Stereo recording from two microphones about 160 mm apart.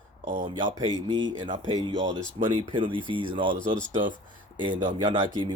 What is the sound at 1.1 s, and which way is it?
Speech, 30° right (ahead or behind).